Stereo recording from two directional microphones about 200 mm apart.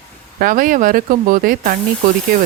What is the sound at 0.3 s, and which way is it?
Speech, 45° right (ahead or behind).